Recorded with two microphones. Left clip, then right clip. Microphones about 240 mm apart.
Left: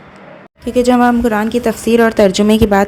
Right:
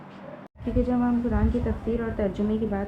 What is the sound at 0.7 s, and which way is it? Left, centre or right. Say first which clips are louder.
A woman's voice: left 15 dB; left.